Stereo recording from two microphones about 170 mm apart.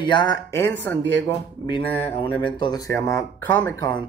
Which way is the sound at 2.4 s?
30° left (ahead or behind).